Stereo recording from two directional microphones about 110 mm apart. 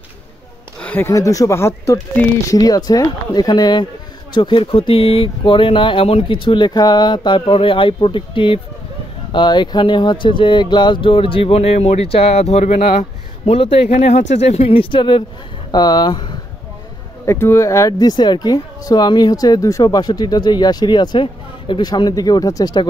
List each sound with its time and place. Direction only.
0.7 s a sound: 15° left (ahead or behind)
1.1 s speech: 30° left (ahead or behind)
4.3 s speech: 50° left (ahead or behind); by 12.9 s 90° left
13.5 s speech: 60° left (ahead or behind)
14.7 s speech: 50° left (ahead or behind)
17.3 s speech: 25° left (ahead or behind)